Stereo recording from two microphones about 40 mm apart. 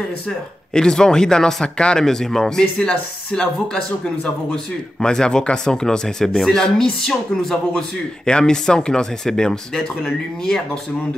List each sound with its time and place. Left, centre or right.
0.7 s speech: centre
2.0 s speech: centre
2.9 s speech: left
5.0 s speech: centre